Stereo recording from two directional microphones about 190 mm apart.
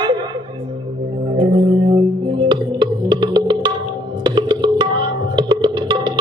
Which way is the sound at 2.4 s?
25° right (ahead or behind).